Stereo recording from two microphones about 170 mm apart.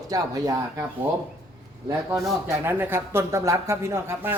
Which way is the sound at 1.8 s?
20° right (ahead or behind).